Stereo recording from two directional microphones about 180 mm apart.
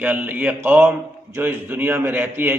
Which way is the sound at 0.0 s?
10° right (ahead or behind).